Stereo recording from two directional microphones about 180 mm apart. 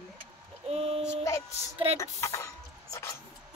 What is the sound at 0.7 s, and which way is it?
Speech, 35° right (ahead or behind).